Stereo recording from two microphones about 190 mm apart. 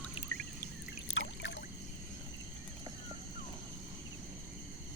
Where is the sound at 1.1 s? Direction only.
80° left.